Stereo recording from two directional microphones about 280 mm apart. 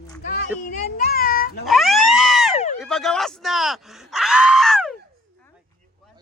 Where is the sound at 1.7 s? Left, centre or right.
Centre.